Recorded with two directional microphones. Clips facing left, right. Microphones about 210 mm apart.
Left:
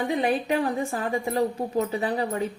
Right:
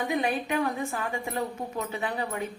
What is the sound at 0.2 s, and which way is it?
Speech, 35° left (ahead or behind).